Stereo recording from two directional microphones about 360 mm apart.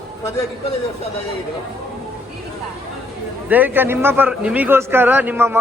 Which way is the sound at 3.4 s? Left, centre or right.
Centre.